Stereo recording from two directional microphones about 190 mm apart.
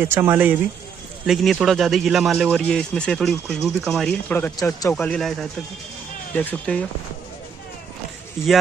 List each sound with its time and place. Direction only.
0.0 s speech: 10° right (ahead or behind); by 4.9 s 15° left (ahead or behind)
4.9 s speech: 5° left (ahead or behind)